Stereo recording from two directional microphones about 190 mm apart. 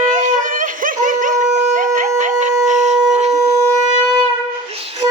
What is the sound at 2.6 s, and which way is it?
Wind instrument, 40° right (ahead or behind).